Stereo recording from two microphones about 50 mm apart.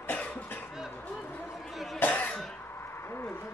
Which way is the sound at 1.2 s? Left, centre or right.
Left.